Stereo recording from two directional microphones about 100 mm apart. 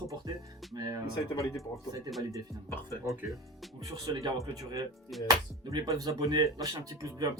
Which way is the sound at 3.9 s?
40° right (ahead or behind).